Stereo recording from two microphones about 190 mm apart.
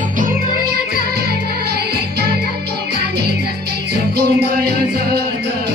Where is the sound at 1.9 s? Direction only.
55° right (ahead or behind).